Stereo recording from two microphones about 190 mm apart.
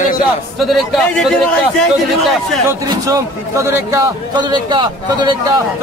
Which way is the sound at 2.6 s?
15° right (ahead or behind).